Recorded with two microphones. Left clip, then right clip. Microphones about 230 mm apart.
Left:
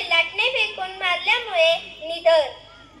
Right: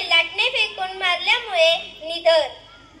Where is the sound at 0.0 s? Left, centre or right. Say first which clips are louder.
Right 1 dB; right.